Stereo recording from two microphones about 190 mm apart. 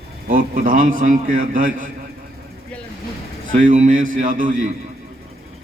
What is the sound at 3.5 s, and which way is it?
A man's voice, 40° right (ahead or behind).